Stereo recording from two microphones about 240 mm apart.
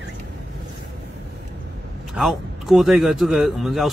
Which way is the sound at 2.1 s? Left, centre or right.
Centre.